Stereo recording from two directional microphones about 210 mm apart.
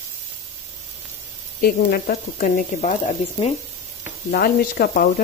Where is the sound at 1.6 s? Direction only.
45° left (ahead or behind).